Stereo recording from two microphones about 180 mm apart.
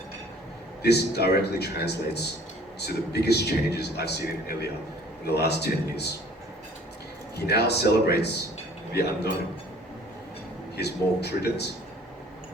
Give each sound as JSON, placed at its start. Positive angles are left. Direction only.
{"t": 0.8, "sound": "a man's voice", "side_deg": 65}
{"t": 7.3, "sound": "a man's voice", "side_deg": 65}
{"t": 10.8, "sound": "a man's voice", "side_deg": 65}